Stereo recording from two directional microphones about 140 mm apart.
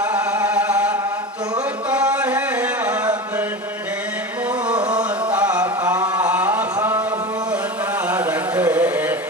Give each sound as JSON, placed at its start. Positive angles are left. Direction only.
{"t": 0.0, "sound": "music", "side_deg": -10}
{"t": 1.9, "sound": "chant", "side_deg": -10}
{"t": 4.9, "sound": "music", "side_deg": -10}
{"t": 6.1, "sound": "a sound", "side_deg": -10}
{"t": 8.0, "sound": "carnatic music", "side_deg": -10}